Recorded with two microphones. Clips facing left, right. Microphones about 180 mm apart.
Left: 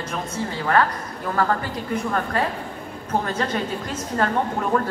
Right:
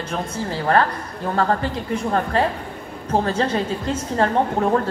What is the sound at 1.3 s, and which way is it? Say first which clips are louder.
Speech: right 2 dB; 30° right (ahead or behind).